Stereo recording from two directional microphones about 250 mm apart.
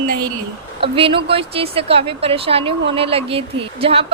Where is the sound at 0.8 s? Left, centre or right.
Right.